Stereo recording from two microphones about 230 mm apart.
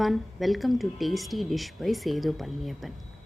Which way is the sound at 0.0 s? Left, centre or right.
Centre.